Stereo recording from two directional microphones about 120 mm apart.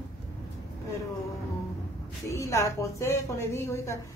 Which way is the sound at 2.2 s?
25° left (ahead or behind).